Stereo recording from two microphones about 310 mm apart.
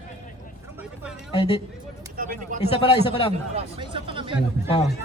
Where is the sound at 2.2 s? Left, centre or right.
Right.